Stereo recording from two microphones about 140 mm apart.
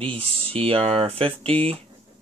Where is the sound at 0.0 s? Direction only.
40° right (ahead or behind).